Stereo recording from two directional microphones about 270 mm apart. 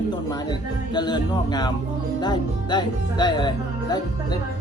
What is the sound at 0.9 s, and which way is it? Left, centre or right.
A man's voice, centre.